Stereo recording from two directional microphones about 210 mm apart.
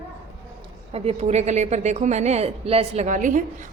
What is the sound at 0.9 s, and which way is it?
A woman's voice, 30° right (ahead or behind).